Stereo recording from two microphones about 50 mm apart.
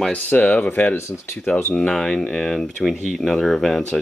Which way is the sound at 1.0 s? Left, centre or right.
Left.